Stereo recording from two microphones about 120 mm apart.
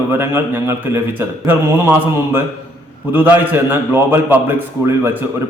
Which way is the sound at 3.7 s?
20° right (ahead or behind).